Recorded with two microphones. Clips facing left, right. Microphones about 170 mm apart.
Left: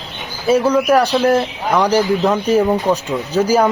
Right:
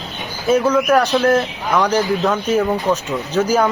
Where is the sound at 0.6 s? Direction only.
10° left (ahead or behind).